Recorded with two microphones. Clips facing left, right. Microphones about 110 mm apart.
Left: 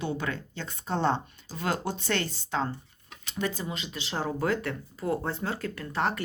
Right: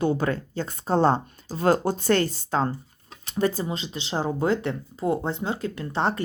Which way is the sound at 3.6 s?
30° right (ahead or behind).